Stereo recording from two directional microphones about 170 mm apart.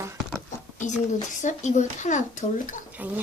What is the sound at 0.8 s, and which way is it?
Speech, 45° left (ahead or behind).